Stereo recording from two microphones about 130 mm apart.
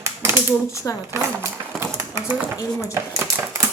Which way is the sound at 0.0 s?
20° right (ahead or behind).